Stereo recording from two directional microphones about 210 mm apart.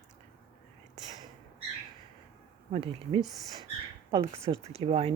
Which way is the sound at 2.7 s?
25° right (ahead or behind).